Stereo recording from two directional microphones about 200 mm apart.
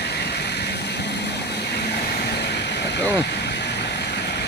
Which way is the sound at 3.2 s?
60° left (ahead or behind).